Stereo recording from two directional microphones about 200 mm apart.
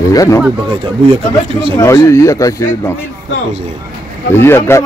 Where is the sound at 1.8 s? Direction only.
15° left (ahead or behind).